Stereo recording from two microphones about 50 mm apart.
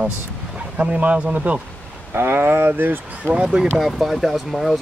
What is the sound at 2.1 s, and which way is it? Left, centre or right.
Speech, right.